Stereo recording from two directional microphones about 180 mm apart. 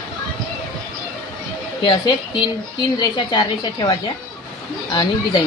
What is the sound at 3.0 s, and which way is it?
A woman's voice, 25° left (ahead or behind).